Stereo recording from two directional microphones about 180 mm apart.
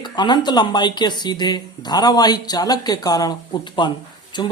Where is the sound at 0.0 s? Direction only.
25° left (ahead or behind).